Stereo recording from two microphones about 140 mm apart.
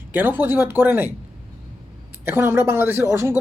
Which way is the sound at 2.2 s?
15° right (ahead or behind).